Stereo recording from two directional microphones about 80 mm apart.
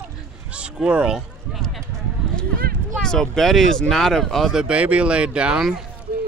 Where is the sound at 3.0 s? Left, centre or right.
Centre.